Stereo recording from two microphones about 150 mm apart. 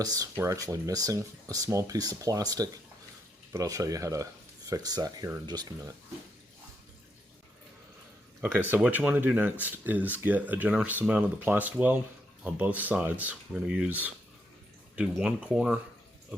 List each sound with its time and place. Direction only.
0.0 s speech: 25° right (ahead or behind)
8.7 s speech: 10° right (ahead or behind)